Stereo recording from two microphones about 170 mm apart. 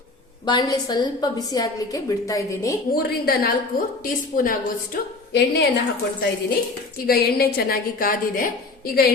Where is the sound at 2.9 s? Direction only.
60° left (ahead or behind).